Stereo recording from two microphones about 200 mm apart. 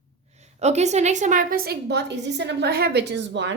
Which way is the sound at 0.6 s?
35° right (ahead or behind).